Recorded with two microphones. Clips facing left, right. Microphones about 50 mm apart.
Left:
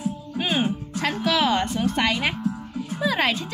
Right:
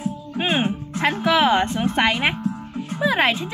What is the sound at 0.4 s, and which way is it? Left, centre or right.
Music, right.